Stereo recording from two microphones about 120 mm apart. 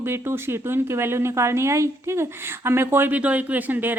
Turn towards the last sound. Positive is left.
turn(degrees=-15)  # may be behind; listen again after turning